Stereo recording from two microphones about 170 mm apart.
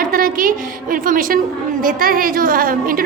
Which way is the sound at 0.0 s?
55° right (ahead or behind).